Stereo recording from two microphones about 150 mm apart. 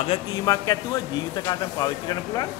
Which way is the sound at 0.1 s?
25° left (ahead or behind).